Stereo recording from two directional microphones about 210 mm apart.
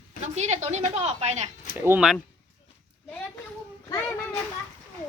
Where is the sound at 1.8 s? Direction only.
10° right (ahead or behind).